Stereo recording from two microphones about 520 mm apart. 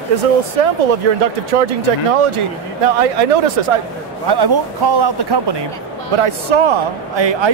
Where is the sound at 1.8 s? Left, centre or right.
Right.